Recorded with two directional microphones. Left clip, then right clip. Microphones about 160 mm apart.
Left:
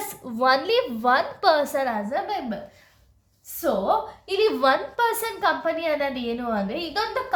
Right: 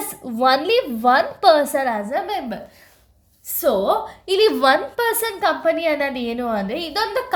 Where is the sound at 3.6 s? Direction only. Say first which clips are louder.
Right 4 dB; 50° right (ahead or behind).